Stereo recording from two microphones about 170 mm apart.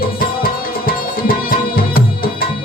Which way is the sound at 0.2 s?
60° left (ahead or behind).